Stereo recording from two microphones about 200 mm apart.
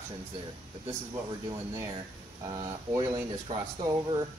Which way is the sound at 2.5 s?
20° right (ahead or behind).